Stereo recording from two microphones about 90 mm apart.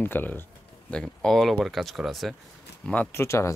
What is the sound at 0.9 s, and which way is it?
Speech, 10° left (ahead or behind).